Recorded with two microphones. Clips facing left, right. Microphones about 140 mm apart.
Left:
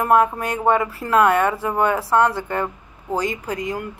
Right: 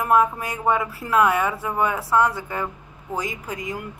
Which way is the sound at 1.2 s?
65° left (ahead or behind).